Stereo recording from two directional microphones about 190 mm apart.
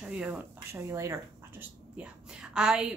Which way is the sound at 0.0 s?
10° right (ahead or behind).